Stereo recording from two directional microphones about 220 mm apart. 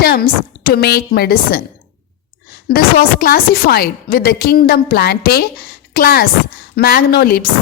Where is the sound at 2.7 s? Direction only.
45° left (ahead or behind).